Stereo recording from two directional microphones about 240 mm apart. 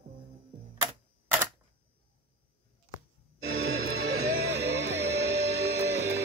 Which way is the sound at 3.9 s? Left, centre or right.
Right.